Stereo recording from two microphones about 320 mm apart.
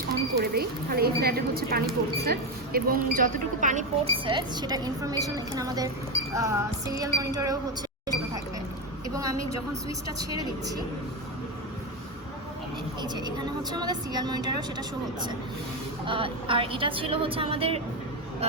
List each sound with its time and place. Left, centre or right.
0.1 s a woman's voice: right; by 7.6 s centre
9.0 s a sound: centre
10.2 s speech: centre
13.0 s speech: centre